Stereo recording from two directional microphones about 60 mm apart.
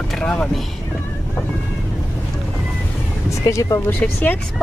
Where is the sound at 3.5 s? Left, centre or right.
Left.